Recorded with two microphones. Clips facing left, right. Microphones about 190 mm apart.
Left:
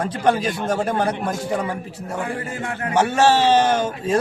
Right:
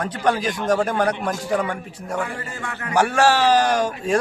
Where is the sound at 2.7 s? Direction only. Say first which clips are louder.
Left 5 dB; 55° left (ahead or behind).